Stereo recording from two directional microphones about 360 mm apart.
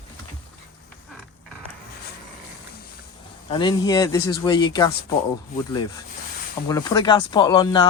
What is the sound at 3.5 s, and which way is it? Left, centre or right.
Speech, centre.